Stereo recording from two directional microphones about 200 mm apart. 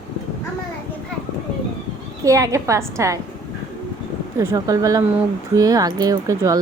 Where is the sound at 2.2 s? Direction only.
15° right (ahead or behind).